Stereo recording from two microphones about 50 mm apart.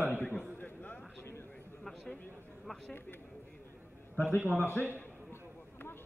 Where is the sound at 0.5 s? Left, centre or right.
Left.